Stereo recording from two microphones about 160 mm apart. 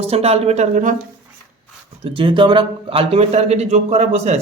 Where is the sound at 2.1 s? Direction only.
35° right (ahead or behind).